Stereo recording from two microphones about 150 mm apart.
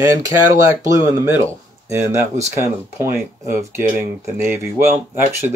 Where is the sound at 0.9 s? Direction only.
20° right (ahead or behind).